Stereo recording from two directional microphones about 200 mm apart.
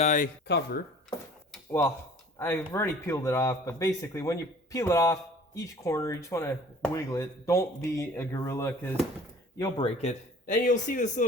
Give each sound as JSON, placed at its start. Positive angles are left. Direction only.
{"t": 0.0, "sound": "speech", "side_deg": 40}
{"t": 0.4, "sound": "speech", "side_deg": 55}
{"t": 2.4, "sound": "speech", "side_deg": 15}
{"t": 9.6, "sound": "speech", "side_deg": 25}